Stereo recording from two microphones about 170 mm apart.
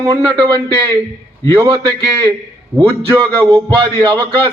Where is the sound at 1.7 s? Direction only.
25° right (ahead or behind).